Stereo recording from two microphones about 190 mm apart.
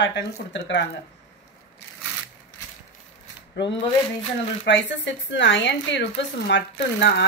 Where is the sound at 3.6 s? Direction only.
70° left (ahead or behind).